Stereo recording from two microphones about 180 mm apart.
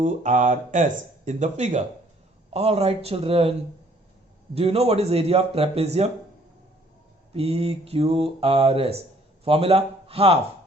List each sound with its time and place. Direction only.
0.0 s speech: 45° right (ahead or behind)
4.5 s speech: 35° right (ahead or behind)
7.3 s speech: 35° right (ahead or behind)